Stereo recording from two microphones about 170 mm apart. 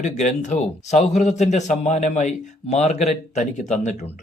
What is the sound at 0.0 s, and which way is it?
Speech, 45° left (ahead or behind).